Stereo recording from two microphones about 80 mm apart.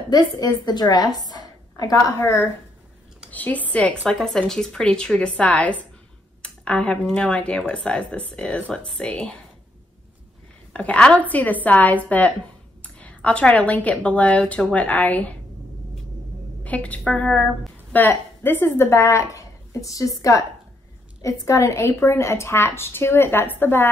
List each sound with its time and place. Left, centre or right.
0.1 s a woman's voice: left
2.1 s a woman's voice: left
3.3 s speech: centre
4.0 s speech: centre
10.7 s speech: centre
16.6 s speech: centre
17.9 s a woman's voice: left